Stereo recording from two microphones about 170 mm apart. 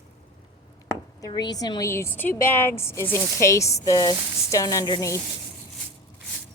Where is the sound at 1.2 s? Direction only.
25° left (ahead or behind).